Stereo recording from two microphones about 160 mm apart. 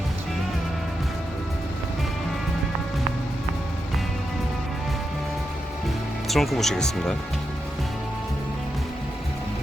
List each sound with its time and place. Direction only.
6.2 s speech: centre (ahead or behind)